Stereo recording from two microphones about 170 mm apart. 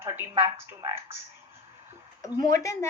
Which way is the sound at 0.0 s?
15° right (ahead or behind).